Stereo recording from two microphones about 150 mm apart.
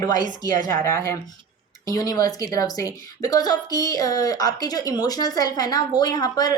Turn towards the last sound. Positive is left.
turn(degrees=25)  # may be behind; listen again after turning